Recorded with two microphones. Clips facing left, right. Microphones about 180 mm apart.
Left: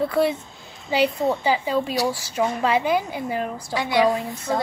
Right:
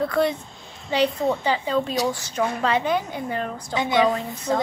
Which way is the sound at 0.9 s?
5° left (ahead or behind).